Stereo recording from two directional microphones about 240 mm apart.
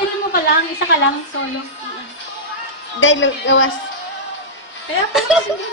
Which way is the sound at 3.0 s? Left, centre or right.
Left.